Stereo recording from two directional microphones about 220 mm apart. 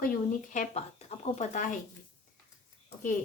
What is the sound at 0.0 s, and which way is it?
Speech, 35° left (ahead or behind).